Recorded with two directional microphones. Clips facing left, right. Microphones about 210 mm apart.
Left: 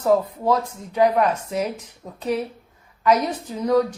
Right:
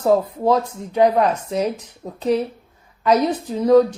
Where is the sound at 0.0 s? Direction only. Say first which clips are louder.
Right 2 dB; 30° right (ahead or behind).